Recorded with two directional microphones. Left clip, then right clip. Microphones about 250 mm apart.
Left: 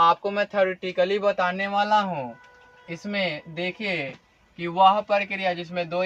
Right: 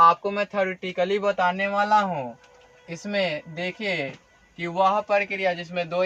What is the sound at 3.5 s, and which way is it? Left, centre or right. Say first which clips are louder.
A man's voice: left 1 dB; centre.